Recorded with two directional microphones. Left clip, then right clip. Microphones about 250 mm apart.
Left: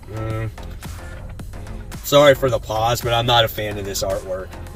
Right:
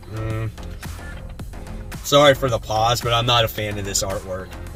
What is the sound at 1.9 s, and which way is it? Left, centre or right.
Speech, centre.